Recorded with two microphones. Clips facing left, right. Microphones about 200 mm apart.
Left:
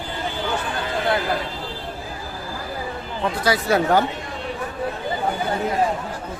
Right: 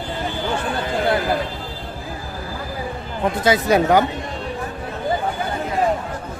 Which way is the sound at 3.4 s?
20° right (ahead or behind).